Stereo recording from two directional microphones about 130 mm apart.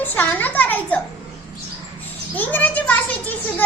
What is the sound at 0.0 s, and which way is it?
Speech, 15° left (ahead or behind).